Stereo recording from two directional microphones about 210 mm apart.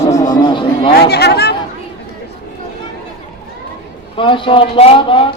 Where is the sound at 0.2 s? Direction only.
20° left (ahead or behind).